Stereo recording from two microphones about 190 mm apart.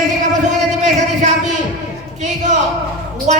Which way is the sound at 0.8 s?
40° right (ahead or behind).